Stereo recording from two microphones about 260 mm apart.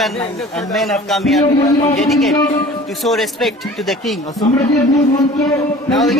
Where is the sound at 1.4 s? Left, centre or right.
Left.